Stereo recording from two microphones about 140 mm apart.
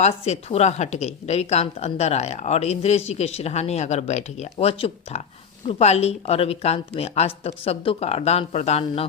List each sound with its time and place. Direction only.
0.0 s speech: 50° left (ahead or behind)